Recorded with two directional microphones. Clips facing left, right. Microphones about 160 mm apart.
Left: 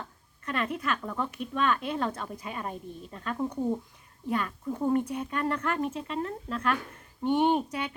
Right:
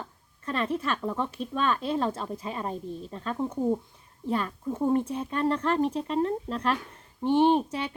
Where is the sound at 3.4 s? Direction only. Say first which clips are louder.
Right 3 dB; 5° right (ahead or behind).